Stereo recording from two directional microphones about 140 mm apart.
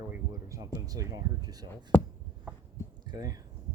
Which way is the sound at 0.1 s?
20° right (ahead or behind).